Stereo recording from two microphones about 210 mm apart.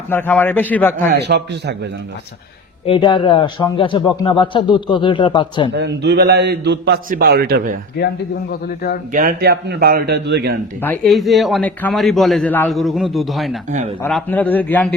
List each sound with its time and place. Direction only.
0.1 s a man's voice: 10° left (ahead or behind)
1.1 s a man's voice: 55° right (ahead or behind)
2.8 s speech: 25° left (ahead or behind)
5.7 s a man's voice: 55° right (ahead or behind)
9.1 s a man's voice: 45° right (ahead or behind)
10.8 s a man's voice: 10° left (ahead or behind)
13.7 s speech: 35° right (ahead or behind)
14.0 s a man's voice: 5° left (ahead or behind)